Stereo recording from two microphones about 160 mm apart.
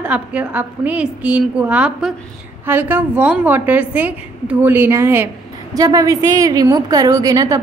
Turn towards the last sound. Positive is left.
turn(degrees=-20)  # may be behind; listen again after turning